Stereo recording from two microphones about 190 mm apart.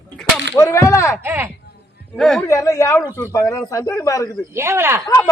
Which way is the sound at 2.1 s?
Centre (ahead or behind).